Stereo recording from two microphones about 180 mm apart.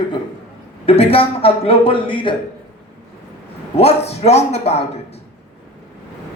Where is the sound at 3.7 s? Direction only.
35° left (ahead or behind).